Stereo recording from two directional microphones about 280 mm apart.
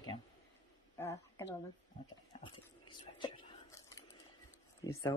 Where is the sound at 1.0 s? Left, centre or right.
Centre.